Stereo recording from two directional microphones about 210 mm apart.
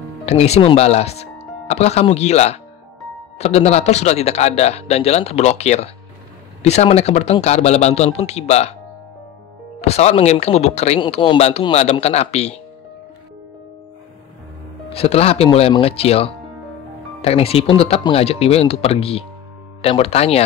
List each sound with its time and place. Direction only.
0.2 s speech: 30° left (ahead or behind)
9.8 s speech: 30° left (ahead or behind)
14.9 s speech: 30° left (ahead or behind)